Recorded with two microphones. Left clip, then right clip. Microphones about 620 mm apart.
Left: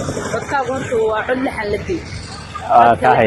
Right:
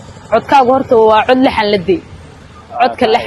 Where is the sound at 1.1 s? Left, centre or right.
Right.